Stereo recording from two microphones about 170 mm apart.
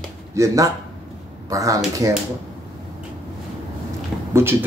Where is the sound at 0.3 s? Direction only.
15° right (ahead or behind).